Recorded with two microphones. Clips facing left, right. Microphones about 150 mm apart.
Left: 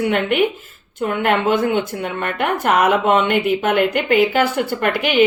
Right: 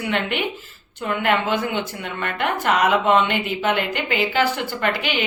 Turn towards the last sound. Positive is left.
turn(degrees=55)  # may be behind; listen again after turning